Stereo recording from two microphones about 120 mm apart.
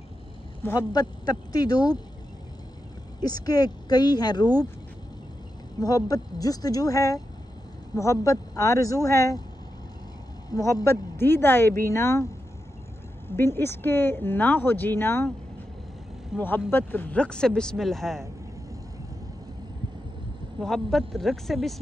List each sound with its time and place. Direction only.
0.7 s speech: 30° left (ahead or behind)
3.2 s speech: 35° left (ahead or behind)
5.8 s speech: 30° left (ahead or behind)
10.5 s speech: 30° left (ahead or behind)
13.4 s speech: 20° left (ahead or behind)
16.3 s speech: 15° left (ahead or behind)
20.6 s speech: centre (ahead or behind)